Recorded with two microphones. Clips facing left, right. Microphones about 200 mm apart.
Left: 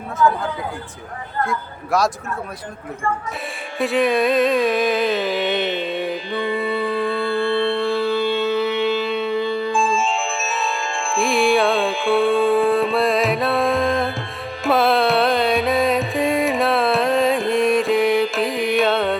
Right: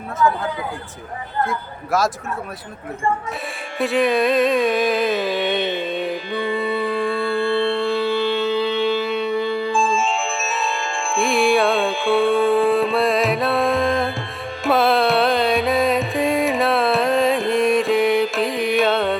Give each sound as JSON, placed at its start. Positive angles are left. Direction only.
{"t": 0.2, "sound": "speech", "side_deg": 0}
{"t": 3.8, "sound": "music", "side_deg": 0}
{"t": 6.4, "sound": "mantra", "side_deg": 15}
{"t": 7.8, "sound": "music", "side_deg": -15}
{"t": 8.2, "sound": "a sound", "side_deg": 20}
{"t": 9.3, "sound": "music", "side_deg": 20}
{"t": 9.7, "sound": "music", "side_deg": 0}